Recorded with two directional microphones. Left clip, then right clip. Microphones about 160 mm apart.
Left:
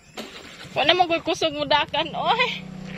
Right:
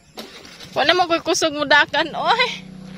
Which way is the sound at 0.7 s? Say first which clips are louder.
Right 2 dB; 40° right (ahead or behind).